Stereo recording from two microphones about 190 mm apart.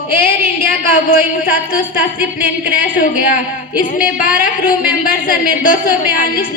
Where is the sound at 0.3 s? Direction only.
50° left (ahead or behind).